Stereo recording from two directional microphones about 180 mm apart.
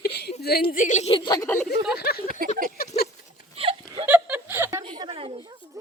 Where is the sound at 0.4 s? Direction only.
55° left (ahead or behind); by 1.6 s 15° left (ahead or behind).